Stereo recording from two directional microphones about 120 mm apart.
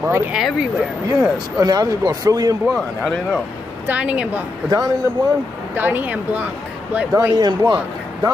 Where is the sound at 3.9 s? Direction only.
10° right (ahead or behind).